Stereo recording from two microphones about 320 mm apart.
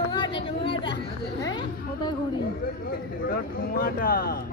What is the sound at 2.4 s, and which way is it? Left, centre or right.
Speech, left.